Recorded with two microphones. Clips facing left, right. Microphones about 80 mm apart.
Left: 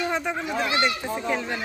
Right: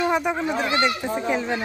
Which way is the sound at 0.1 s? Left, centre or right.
Centre.